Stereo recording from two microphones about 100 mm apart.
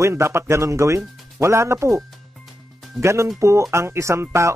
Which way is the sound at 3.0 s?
30° right (ahead or behind).